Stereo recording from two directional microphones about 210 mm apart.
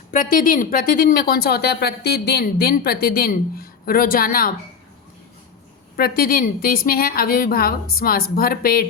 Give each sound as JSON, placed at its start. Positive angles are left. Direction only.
{"t": 0.1, "sound": "speech", "side_deg": 40}
{"t": 6.0, "sound": "speech", "side_deg": 45}